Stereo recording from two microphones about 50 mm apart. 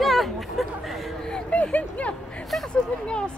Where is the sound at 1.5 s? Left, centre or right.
Left.